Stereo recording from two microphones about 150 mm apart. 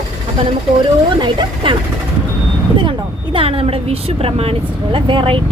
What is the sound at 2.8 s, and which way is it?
Speech, 35° right (ahead or behind).